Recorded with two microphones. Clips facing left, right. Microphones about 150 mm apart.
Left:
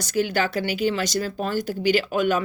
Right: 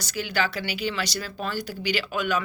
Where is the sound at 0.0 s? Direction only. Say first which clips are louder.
Left 5 dB; 50° left (ahead or behind).